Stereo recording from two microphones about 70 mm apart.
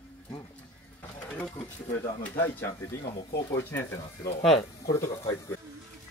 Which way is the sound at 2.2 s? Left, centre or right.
Left.